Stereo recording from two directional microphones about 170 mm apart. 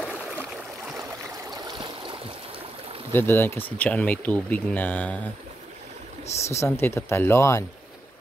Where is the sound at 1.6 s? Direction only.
30° right (ahead or behind).